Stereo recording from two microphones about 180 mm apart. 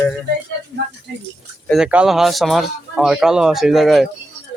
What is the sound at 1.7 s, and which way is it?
Speech, 5° right (ahead or behind).